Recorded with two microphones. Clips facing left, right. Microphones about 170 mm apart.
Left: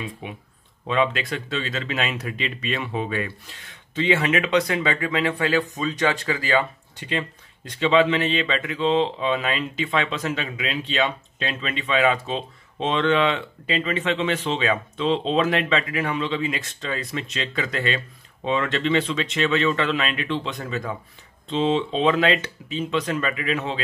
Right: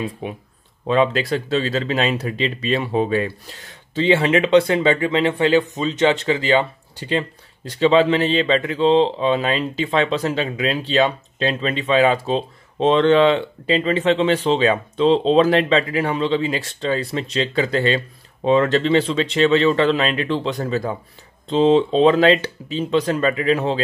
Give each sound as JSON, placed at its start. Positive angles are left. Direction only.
{"t": 0.0, "sound": "speech", "side_deg": -40}